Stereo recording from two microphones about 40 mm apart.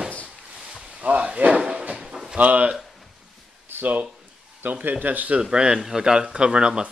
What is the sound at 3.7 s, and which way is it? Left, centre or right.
Speech, right.